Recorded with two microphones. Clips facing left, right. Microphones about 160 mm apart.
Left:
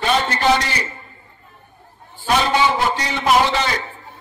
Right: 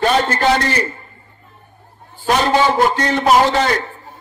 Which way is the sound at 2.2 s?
45° right (ahead or behind).